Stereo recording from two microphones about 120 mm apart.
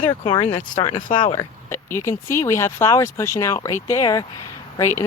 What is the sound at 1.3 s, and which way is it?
Speech, 25° left (ahead or behind).